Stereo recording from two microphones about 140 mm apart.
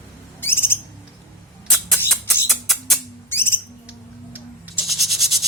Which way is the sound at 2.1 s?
Centre (ahead or behind).